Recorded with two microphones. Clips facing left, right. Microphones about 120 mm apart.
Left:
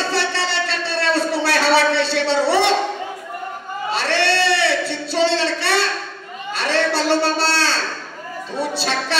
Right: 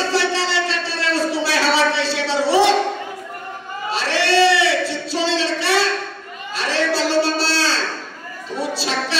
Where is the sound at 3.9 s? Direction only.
60° left (ahead or behind).